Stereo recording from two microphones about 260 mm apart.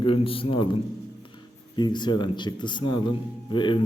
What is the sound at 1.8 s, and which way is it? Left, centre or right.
A man's voice, centre.